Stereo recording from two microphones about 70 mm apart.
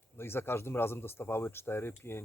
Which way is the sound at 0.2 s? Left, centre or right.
Left.